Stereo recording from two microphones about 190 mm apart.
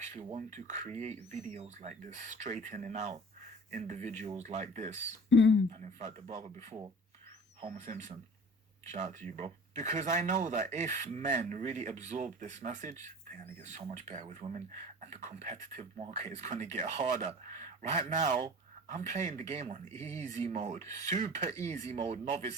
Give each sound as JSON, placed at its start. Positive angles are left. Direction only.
{"t": 0.0, "sound": "speech", "side_deg": -35}
{"t": 5.3, "sound": "speech", "side_deg": 75}
{"t": 5.7, "sound": "speech", "side_deg": -35}
{"t": 19.9, "sound": "speech", "side_deg": 15}
{"t": 20.4, "sound": "speech", "side_deg": -35}
{"t": 20.7, "sound": "speech", "side_deg": 15}
{"t": 21.1, "sound": "speech", "side_deg": -40}